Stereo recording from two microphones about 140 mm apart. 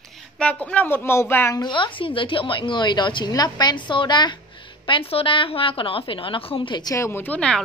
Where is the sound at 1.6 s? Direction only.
35° left (ahead or behind); by 7.6 s 10° left (ahead or behind).